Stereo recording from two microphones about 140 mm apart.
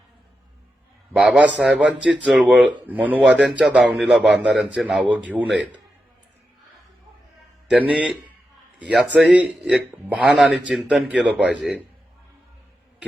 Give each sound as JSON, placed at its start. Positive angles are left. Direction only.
{"t": 1.1, "sound": "a man's voice", "side_deg": -5}
{"t": 7.7, "sound": "a man's voice", "side_deg": -10}